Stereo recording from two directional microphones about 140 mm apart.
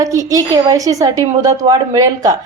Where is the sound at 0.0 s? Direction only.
25° right (ahead or behind).